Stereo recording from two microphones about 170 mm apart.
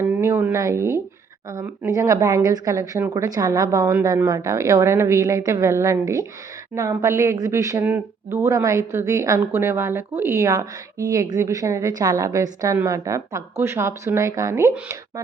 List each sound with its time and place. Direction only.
0.0 s speech: 10° right (ahead or behind)